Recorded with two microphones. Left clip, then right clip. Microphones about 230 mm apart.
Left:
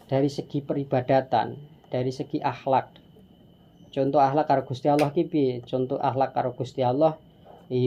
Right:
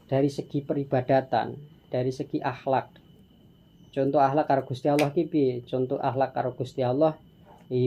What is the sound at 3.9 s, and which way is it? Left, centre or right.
Speech, left.